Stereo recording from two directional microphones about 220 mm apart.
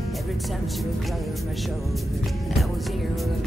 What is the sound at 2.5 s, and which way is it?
Music, centre (ahead or behind).